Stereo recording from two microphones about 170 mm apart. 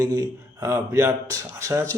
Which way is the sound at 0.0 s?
20° right (ahead or behind).